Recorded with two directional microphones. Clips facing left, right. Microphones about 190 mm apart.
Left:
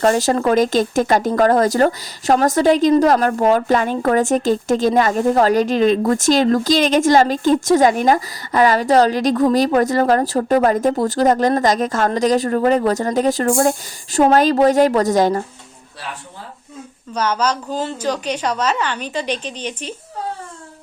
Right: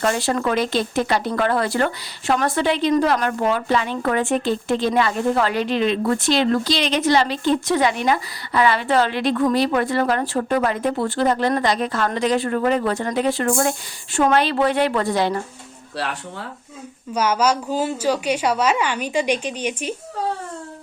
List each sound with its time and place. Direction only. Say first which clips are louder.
0.0 s speech: left 5 dB; 40° left (ahead or behind)
16.0 s speech: right 5 dB; 75° right (ahead or behind)
17.2 s a woman's voice: right 1 dB; 10° right (ahead or behind)